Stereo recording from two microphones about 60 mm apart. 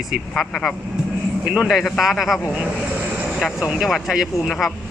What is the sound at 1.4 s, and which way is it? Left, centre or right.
Speech, centre.